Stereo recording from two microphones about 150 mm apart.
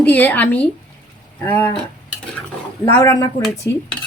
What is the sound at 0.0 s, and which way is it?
Speech, 10° left (ahead or behind).